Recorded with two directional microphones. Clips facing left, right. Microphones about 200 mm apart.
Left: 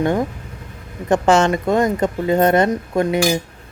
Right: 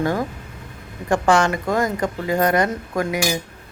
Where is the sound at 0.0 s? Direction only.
25° left (ahead or behind).